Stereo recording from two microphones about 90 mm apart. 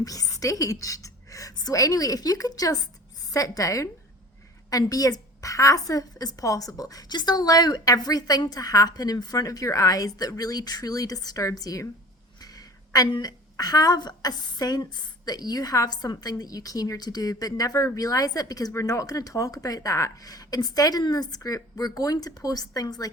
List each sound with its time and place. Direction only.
0.0 s a woman's voice: 40° left (ahead or behind)
12.4 s a sound: 45° left (ahead or behind)
13.2 s a woman's voice: 45° left (ahead or behind)